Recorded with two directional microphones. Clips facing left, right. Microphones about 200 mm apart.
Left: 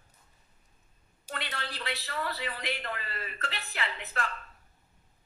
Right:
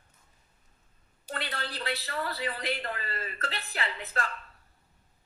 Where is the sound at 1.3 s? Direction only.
40° right (ahead or behind).